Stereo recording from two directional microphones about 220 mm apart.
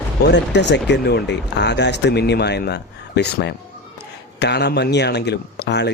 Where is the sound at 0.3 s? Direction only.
50° left (ahead or behind).